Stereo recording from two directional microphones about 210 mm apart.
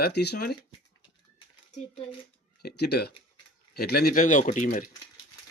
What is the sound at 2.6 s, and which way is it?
Speech, 50° left (ahead or behind).